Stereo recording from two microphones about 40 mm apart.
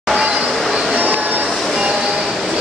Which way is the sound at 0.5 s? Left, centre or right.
Centre.